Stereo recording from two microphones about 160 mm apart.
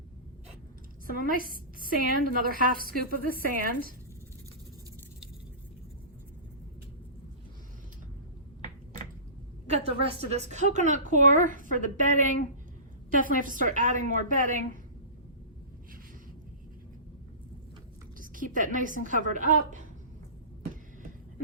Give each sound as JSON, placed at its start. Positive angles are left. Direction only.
{"t": 1.0, "sound": "a woman's voice", "side_deg": -60}
{"t": 9.6, "sound": "a woman's voice", "side_deg": -40}
{"t": 18.2, "sound": "a woman's voice", "side_deg": -55}